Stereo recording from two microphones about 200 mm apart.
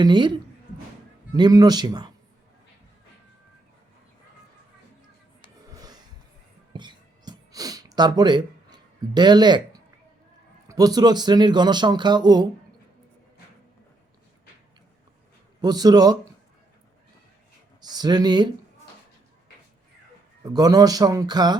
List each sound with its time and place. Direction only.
0.0 s speech: 20° right (ahead or behind)
5.7 s music: 20° right (ahead or behind)
6.7 s a sound: 20° right (ahead or behind)
10.7 s speech: 20° right (ahead or behind)
15.6 s speech: 20° right (ahead or behind)
17.7 s speech: 20° right (ahead or behind)
20.4 s speech: 20° right (ahead or behind)